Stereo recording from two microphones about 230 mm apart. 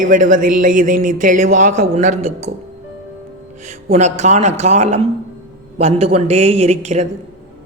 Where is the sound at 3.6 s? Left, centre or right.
Right.